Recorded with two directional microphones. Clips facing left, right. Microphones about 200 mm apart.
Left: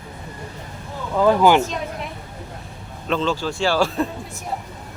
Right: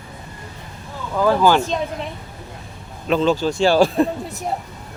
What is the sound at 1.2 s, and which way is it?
Speech, 20° left (ahead or behind).